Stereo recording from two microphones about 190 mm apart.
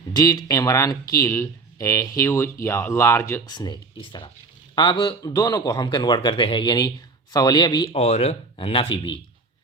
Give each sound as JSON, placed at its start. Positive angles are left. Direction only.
{"t": 0.1, "sound": "a man's voice", "side_deg": 20}
{"t": 7.9, "sound": "speech", "side_deg": 35}